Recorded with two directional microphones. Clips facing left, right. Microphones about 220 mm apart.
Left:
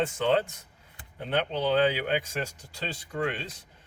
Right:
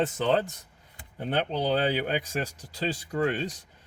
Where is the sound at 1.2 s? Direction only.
35° right (ahead or behind).